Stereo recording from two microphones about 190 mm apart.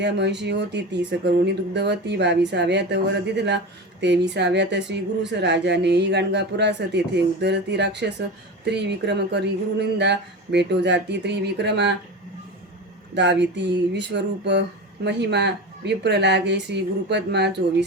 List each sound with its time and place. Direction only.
0.0 s speech: 65° right (ahead or behind)
13.1 s speech: 65° right (ahead or behind)